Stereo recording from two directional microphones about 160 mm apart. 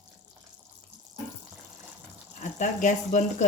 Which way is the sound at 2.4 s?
50° left (ahead or behind).